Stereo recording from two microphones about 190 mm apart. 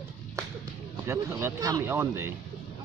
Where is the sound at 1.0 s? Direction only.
15° right (ahead or behind).